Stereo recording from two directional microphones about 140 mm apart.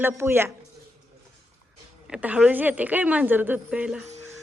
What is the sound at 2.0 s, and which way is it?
Speech, 10° right (ahead or behind).